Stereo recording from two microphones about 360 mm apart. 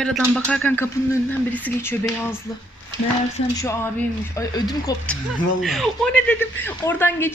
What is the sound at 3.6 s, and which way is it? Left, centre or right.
A woman's voice, centre.